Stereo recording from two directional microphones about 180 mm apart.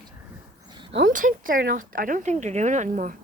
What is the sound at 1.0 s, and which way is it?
Speech, 50° right (ahead or behind).